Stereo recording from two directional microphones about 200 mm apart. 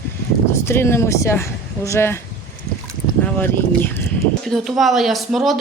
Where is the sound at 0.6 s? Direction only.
10° left (ahead or behind).